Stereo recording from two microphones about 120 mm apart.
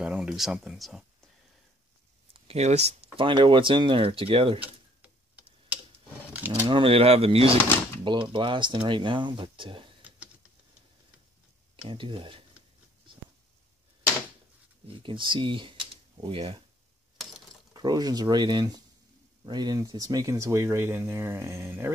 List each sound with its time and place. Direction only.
0.0 s speech: 5° right (ahead or behind)
2.3 s speech: 55° right (ahead or behind)
4.6 s a sound: 10° right (ahead or behind)
6.7 s speech: 50° right (ahead or behind)
8.0 s speech: 40° right (ahead or behind)
10.0 s a sound: 10° right (ahead or behind)
11.9 s speech: 45° right (ahead or behind)
14.9 s speech: 45° right (ahead or behind)
17.7 s speech: 35° right (ahead or behind)